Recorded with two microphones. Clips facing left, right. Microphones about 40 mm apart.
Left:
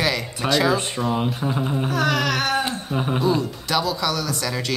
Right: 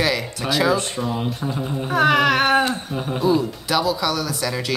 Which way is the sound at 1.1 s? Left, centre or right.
Centre.